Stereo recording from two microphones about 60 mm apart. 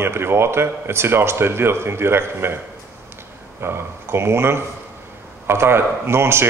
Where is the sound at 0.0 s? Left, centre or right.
Right.